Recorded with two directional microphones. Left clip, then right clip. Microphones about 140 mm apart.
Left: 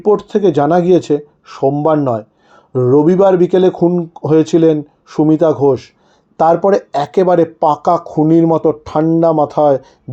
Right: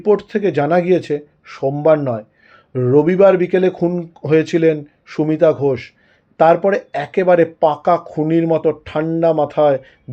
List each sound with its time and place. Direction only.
0.0 s speech: 30° left (ahead or behind)